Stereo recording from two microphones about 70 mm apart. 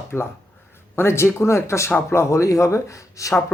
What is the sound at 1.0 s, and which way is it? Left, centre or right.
Speech, left.